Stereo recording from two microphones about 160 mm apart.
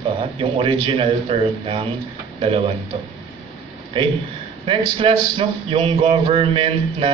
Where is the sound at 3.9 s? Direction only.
35° right (ahead or behind).